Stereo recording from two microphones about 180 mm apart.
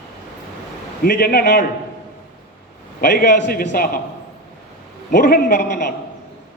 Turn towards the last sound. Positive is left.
turn(degrees=55)  # may be behind; listen again after turning